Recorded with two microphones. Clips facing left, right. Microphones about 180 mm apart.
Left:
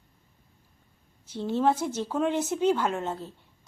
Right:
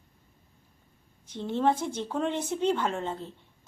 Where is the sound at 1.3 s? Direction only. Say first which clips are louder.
Left 1 dB; 5° left (ahead or behind).